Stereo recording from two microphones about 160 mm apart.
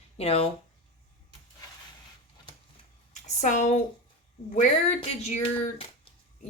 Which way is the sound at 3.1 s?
45° left (ahead or behind).